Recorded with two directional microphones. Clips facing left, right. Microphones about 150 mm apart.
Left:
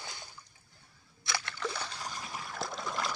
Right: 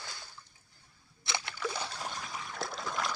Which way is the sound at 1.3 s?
20° right (ahead or behind).